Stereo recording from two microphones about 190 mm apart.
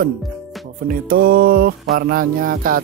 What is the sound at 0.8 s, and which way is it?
Speech, 50° right (ahead or behind).